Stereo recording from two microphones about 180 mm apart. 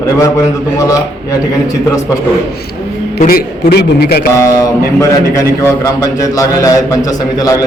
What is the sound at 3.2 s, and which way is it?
A man's voice, 50° left (ahead or behind).